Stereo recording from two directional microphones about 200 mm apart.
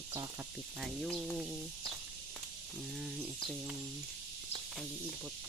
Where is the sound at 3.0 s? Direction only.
Centre (ahead or behind).